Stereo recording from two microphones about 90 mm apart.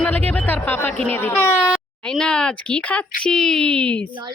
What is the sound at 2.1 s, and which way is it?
Speech, 10° left (ahead or behind).